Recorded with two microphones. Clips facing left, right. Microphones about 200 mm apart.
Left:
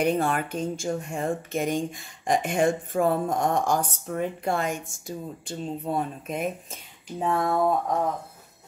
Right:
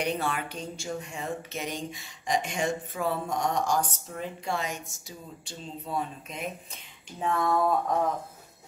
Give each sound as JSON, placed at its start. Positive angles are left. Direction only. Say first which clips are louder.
{"t": 0.0, "sound": "speech", "louder": "left 6 dB", "side_deg": 50}
{"t": 7.2, "sound": "speech", "louder": "left 2 dB", "side_deg": 30}